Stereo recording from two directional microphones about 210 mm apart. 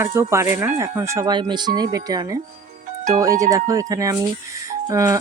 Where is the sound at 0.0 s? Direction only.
15° right (ahead or behind).